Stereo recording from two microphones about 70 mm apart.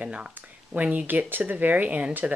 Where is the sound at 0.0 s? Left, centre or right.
Centre.